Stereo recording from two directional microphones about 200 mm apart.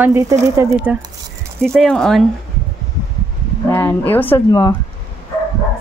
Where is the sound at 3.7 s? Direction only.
10° left (ahead or behind).